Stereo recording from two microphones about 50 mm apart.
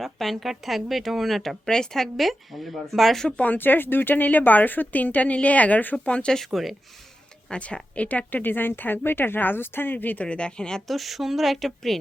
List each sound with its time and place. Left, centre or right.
0.0 s speech: centre
3.2 s speech: left
6.3 s speech: centre
7.5 s speech: left
10.8 s speech: centre